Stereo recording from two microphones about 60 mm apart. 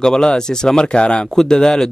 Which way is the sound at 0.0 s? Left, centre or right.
Centre.